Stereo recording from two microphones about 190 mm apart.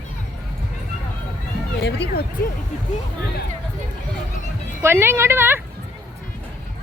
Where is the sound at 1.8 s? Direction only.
65° left (ahead or behind).